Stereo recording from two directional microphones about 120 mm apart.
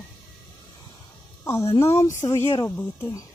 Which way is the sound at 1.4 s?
25° left (ahead or behind).